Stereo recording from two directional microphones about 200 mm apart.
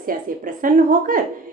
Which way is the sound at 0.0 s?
45° right (ahead or behind).